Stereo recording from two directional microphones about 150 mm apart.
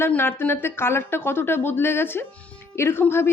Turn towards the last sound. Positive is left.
turn(degrees=15)  # may be behind; listen again after turning